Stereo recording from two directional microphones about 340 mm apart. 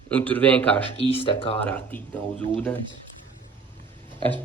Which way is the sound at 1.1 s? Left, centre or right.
Centre.